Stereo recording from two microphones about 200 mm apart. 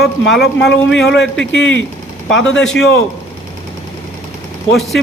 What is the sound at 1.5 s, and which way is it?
Speech, 65° left (ahead or behind).